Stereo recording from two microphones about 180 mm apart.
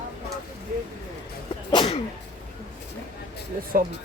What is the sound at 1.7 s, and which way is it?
Sneeze, 25° left (ahead or behind).